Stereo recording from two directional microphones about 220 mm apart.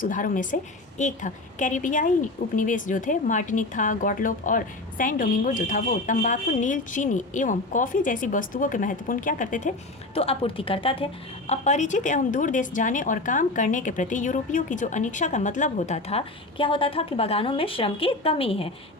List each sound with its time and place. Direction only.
0.0 s a woman's voice: 35° left (ahead or behind)